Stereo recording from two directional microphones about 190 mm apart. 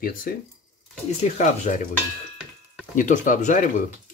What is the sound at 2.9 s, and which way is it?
Speech, 40° left (ahead or behind).